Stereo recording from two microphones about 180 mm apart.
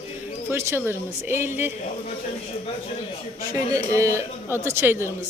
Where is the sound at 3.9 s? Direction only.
15° right (ahead or behind).